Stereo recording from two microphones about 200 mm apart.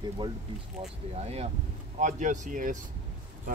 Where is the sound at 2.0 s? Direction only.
40° right (ahead or behind).